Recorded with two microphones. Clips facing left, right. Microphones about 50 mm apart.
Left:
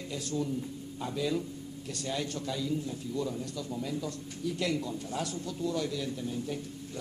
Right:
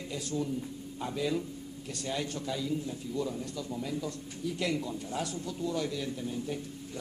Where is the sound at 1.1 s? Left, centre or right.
Centre.